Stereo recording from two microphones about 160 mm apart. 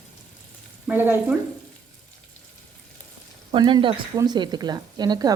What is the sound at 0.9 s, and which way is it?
Stir, 10° right (ahead or behind).